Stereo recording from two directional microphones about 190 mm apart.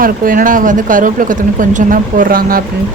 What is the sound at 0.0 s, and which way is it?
Speech, 45° right (ahead or behind).